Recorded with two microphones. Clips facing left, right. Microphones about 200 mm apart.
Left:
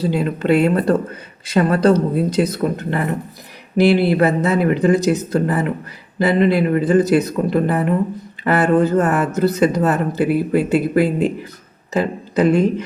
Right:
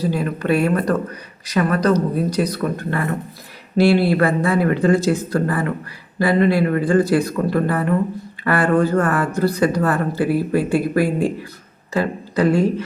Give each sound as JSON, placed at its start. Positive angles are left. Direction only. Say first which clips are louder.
{"t": 0.0, "sound": "speech", "louder": "left 2 dB", "side_deg": 25}